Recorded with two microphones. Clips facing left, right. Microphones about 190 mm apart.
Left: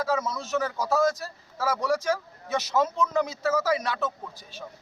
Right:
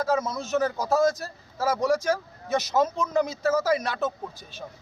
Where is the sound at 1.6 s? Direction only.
45° right (ahead or behind).